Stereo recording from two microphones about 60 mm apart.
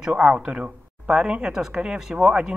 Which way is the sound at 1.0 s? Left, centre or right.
Centre.